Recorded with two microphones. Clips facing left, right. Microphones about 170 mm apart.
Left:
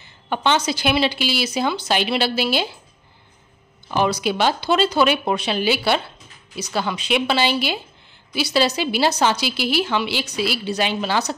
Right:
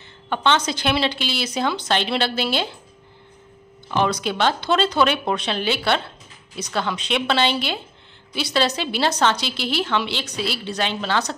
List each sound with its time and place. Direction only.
0.0 s a woman's voice: 10° left (ahead or behind)
3.9 s a woman's voice: 5° left (ahead or behind)